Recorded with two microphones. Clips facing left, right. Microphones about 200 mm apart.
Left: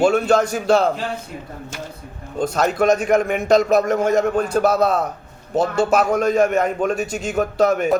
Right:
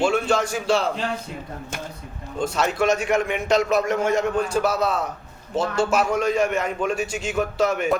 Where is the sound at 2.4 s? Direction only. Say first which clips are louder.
Left 4 dB; 40° left (ahead or behind).